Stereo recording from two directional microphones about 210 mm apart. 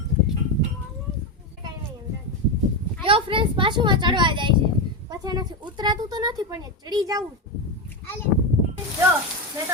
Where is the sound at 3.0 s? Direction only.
25° right (ahead or behind).